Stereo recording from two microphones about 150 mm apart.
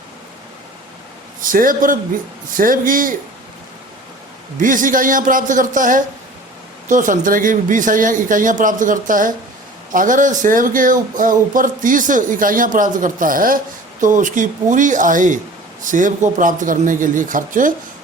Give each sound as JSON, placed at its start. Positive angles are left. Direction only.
{"t": 1.4, "sound": "speech", "side_deg": -65}
{"t": 4.5, "sound": "speech", "side_deg": -60}